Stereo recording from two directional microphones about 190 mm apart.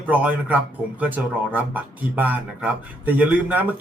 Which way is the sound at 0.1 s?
10° right (ahead or behind).